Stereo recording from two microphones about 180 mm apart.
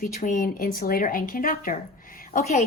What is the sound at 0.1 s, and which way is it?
Speech, 45° left (ahead or behind).